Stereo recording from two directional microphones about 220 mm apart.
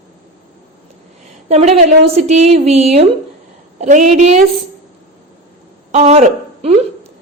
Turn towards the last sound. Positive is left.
turn(degrees=-30)  # may be behind; listen again after turning